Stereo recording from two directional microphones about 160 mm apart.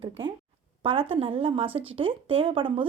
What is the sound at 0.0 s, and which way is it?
A woman's voice, 30° right (ahead or behind).